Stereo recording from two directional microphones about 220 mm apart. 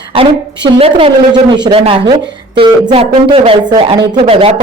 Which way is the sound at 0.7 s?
25° right (ahead or behind).